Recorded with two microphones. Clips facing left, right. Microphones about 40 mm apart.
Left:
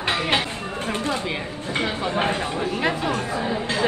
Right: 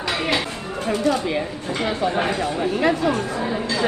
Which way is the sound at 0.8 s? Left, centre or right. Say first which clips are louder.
Right 6 dB; left.